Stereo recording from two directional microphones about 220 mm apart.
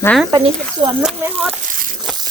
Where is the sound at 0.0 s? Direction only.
5° left (ahead or behind).